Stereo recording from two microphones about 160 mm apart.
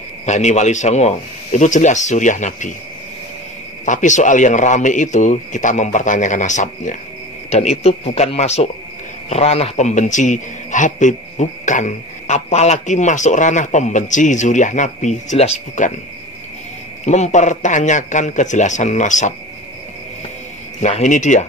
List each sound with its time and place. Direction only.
0.2 s a man's voice: 45° left (ahead or behind)
3.8 s a man's voice: 50° left (ahead or behind)
17.0 s a man's voice: 45° left (ahead or behind)
20.8 s a man's voice: 50° left (ahead or behind)